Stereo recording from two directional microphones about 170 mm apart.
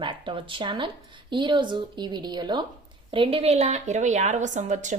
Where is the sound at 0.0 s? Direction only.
30° right (ahead or behind).